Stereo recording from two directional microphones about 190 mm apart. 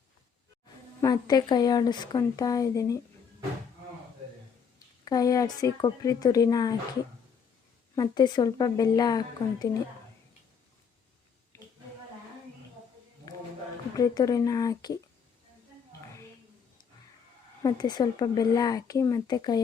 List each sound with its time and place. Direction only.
1.0 s speech: 20° left (ahead or behind)
5.0 s speech: 20° left (ahead or behind)
7.9 s speech: 20° left (ahead or behind)
11.5 s a sound: 15° left (ahead or behind)
13.9 s speech: 20° left (ahead or behind)
17.6 s speech: 20° left (ahead or behind)